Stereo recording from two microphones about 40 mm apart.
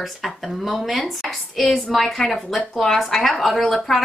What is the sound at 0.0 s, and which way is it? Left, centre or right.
A woman's voice, centre.